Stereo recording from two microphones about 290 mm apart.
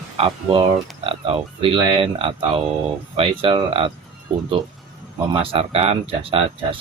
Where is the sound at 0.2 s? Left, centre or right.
Centre.